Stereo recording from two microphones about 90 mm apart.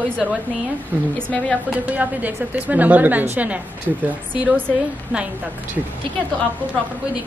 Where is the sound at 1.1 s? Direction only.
15° left (ahead or behind).